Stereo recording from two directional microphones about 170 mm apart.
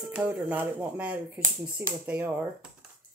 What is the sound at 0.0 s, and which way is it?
Speech, 5° right (ahead or behind).